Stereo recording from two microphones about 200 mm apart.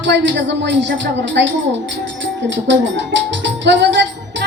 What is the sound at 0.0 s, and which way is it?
A woman's voice, 60° right (ahead or behind).